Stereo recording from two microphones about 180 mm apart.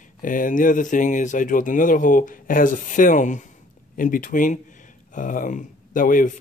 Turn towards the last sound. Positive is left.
turn(degrees=50)  # may be behind; listen again after turning